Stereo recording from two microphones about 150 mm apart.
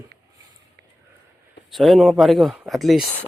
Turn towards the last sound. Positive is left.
turn(degrees=0)  # may be behind; listen again after turning